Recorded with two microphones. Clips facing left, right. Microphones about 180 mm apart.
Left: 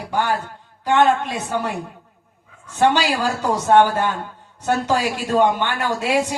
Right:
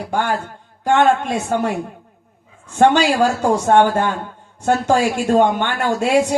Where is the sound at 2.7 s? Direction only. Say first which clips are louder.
Right 4 dB; 50° right (ahead or behind).